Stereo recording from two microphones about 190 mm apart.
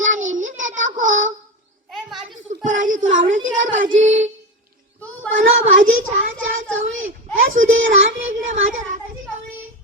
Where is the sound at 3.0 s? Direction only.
45° right (ahead or behind).